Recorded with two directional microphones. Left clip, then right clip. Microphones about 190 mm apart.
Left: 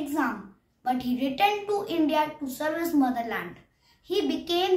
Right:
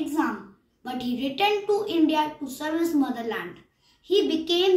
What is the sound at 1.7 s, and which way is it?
A child's voice, 15° left (ahead or behind).